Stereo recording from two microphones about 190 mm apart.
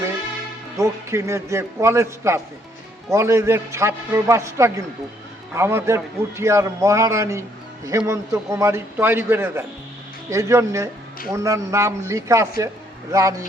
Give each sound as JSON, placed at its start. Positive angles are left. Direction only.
{"t": 0.8, "sound": "a man's voice", "side_deg": -15}